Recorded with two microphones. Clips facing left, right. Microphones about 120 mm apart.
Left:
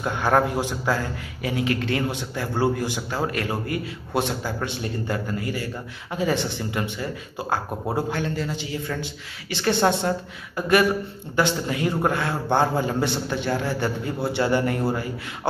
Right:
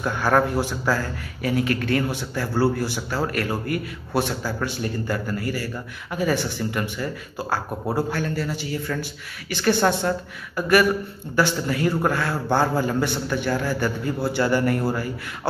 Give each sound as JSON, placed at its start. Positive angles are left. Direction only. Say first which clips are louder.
{"t": 0.0, "sound": "a man's voice", "louder": "even", "side_deg": 20}